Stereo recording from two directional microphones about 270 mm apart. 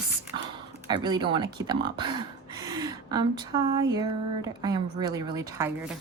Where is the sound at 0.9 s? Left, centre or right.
Centre.